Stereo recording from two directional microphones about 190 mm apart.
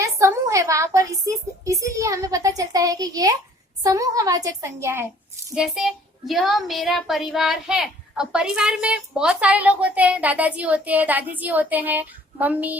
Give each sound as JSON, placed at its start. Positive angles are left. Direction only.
{"t": 0.0, "sound": "a woman's voice", "side_deg": -15}
{"t": 5.5, "sound": "a child's voice", "side_deg": 0}